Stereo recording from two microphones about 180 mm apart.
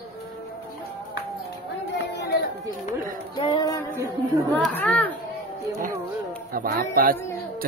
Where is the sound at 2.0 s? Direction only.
65° left (ahead or behind).